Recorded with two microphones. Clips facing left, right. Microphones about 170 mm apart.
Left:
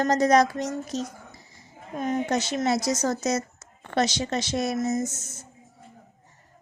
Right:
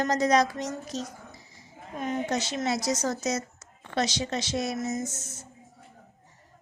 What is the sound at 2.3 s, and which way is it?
Speech, 50° left (ahead or behind).